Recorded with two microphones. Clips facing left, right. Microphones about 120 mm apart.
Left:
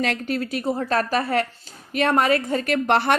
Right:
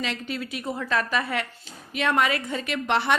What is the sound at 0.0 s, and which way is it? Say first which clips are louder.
A woman's voice: left 6 dB; 50° left (ahead or behind).